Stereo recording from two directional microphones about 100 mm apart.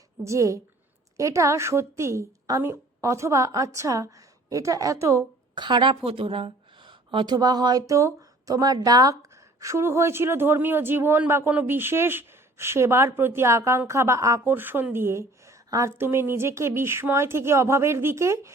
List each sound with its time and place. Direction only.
0.2 s a woman's voice: 30° right (ahead or behind)
5.5 s a woman's voice: 50° right (ahead or behind)
7.3 s speech: 45° right (ahead or behind)
14.4 s speech: 20° right (ahead or behind)